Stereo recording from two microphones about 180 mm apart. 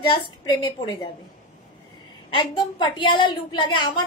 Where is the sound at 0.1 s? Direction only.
25° left (ahead or behind).